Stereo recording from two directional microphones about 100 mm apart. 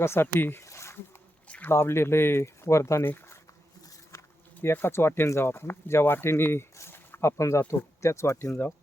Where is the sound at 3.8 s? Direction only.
30° left (ahead or behind).